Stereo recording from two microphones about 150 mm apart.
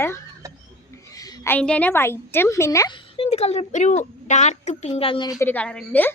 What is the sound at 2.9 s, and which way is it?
A woman's voice, 40° left (ahead or behind).